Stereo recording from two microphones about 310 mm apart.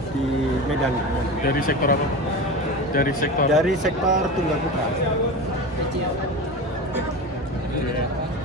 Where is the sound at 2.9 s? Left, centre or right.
Left.